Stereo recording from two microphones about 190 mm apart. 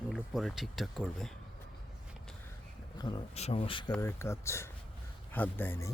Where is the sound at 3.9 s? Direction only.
15° left (ahead or behind).